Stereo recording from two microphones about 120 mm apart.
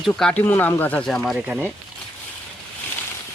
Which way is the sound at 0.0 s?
5° left (ahead or behind).